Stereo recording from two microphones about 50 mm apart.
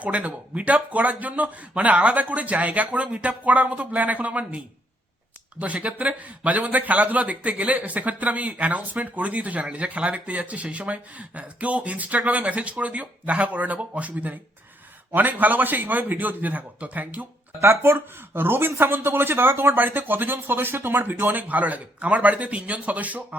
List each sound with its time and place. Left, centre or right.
0.0 s a man's voice: right
17.6 s speech: right